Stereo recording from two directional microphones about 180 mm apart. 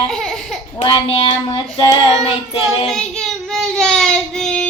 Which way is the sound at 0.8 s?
30° left (ahead or behind).